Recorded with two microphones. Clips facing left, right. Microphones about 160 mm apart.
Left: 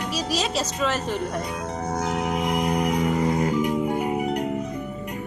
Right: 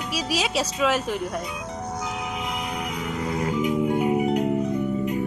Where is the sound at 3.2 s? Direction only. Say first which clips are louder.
Left 4 dB; 45° left (ahead or behind).